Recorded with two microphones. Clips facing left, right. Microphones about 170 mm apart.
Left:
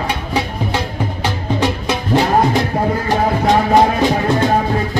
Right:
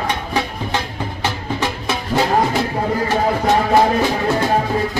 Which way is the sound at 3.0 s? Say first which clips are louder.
Left 2 dB; 15° left (ahead or behind).